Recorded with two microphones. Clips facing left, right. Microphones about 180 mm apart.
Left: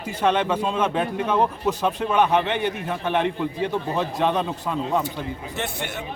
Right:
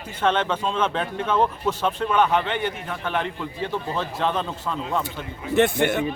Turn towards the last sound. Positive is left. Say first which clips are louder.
# right 10 dB
turn(degrees=-55)  # may be behind; listen again after turning